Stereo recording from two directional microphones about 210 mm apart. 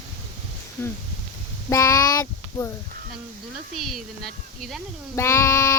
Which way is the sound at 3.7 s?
Centre (ahead or behind).